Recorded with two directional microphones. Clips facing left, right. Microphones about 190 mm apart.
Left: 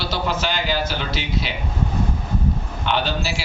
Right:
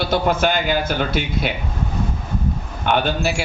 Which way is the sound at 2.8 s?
55° right (ahead or behind).